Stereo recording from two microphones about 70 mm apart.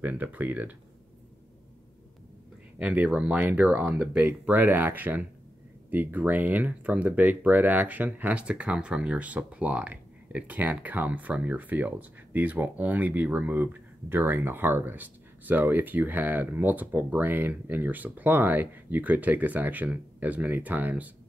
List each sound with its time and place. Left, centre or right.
0.0 s speech: right
2.8 s speech: centre